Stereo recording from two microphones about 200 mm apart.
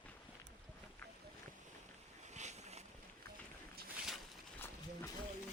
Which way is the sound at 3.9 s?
Centre (ahead or behind).